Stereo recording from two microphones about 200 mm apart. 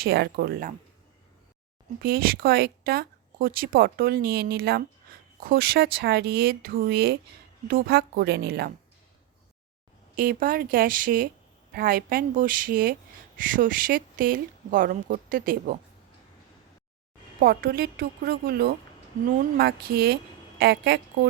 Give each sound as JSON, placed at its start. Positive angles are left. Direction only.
{"t": 0.0, "sound": "speech", "side_deg": -50}
{"t": 2.0, "sound": "speech", "side_deg": -50}
{"t": 10.2, "sound": "speech", "side_deg": -45}
{"t": 17.4, "sound": "speech", "side_deg": -50}